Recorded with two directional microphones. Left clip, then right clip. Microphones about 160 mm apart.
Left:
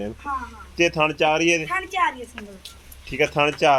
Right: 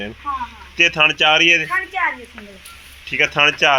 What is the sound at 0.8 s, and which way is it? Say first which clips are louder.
Speech: right 6 dB; 10° left (ahead or behind).